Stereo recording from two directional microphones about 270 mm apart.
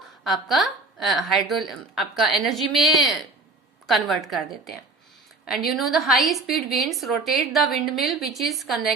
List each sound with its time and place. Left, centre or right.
0.3 s a woman's voice: centre